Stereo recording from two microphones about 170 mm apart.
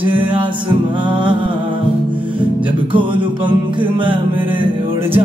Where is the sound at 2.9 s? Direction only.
30° right (ahead or behind).